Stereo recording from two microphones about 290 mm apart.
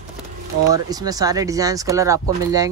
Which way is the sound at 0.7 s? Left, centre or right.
Centre.